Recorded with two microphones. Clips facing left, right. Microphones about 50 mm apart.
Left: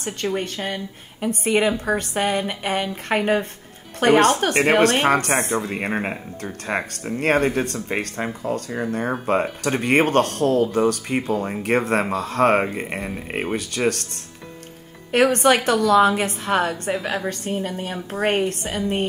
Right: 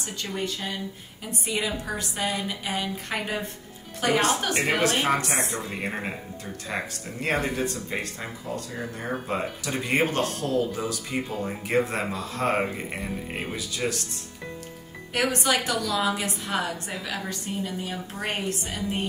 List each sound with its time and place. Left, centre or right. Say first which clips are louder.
0.0 s speech: left 6 dB; left
15.1 s speech: left 8 dB; left